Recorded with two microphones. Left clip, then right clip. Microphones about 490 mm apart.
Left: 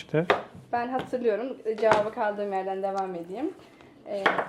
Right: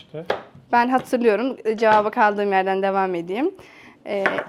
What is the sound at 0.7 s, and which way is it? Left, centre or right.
A woman's voice, right.